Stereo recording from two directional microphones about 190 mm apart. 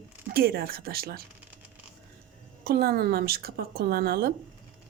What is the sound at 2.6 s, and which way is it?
Speech, 55° right (ahead or behind).